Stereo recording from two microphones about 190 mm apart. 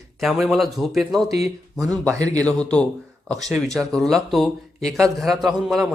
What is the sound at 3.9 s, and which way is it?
Speech, centre (ahead or behind).